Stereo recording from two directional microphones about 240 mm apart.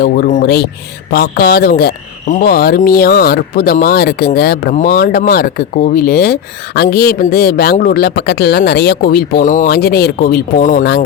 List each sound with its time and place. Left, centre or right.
0.0 s speech: left